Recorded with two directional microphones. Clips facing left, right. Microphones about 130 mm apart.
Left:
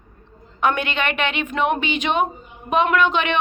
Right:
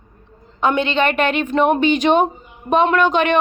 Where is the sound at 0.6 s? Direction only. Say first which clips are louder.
Right 4 dB; 25° right (ahead or behind).